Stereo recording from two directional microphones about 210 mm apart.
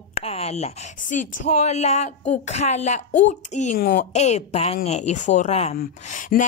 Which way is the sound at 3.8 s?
45° left (ahead or behind).